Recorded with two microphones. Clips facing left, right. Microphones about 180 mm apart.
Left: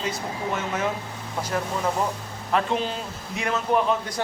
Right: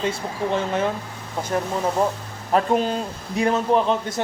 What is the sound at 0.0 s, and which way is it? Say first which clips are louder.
Speech: right 4 dB; 30° right (ahead or behind).